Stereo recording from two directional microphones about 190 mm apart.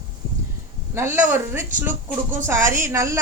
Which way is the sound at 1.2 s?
10° right (ahead or behind).